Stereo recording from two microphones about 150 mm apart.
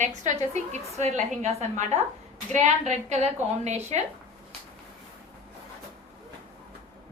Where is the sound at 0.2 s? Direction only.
50° right (ahead or behind).